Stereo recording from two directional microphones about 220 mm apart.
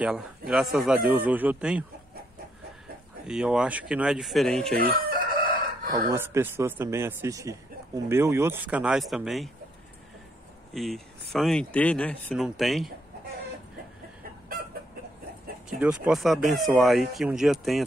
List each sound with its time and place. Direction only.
0.5 s speech: centre (ahead or behind)
3.3 s speech: 5° right (ahead or behind)
4.7 s chicken: 40° right (ahead or behind)
5.9 s speech: 15° right (ahead or behind)
10.7 s speech: centre (ahead or behind)
15.8 s speech: 5° right (ahead or behind)